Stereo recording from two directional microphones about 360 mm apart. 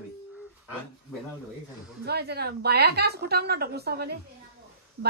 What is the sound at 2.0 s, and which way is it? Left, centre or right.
Speech, right.